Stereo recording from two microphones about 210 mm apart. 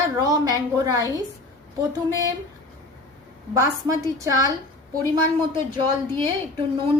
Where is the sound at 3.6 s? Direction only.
15° right (ahead or behind).